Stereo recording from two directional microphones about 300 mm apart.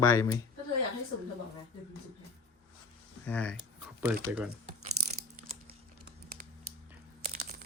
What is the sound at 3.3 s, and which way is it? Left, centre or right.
Speech, centre.